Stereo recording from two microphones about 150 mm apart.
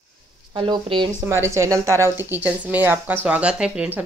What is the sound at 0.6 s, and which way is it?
Speech, 35° right (ahead or behind).